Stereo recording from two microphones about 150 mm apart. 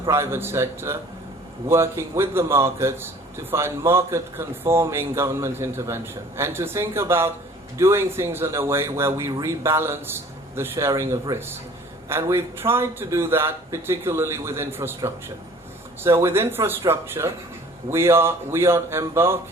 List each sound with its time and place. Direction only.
0.1 s a man's voice: 15° right (ahead or behind)